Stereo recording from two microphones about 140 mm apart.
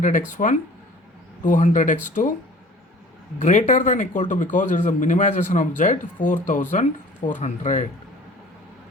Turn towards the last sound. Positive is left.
turn(degrees=60)  # may be behind; listen again after turning